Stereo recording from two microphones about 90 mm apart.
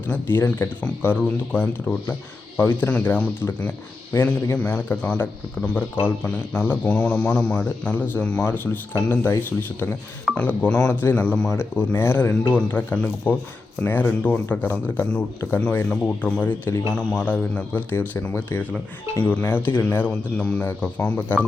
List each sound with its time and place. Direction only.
0.1 s a man's voice: 25° left (ahead or behind)
16.9 s a man's voice: 10° left (ahead or behind)